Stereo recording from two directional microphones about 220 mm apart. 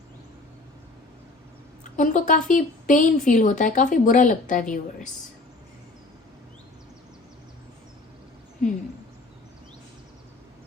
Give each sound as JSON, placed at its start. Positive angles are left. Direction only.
{"t": 1.8, "sound": "speech", "side_deg": 35}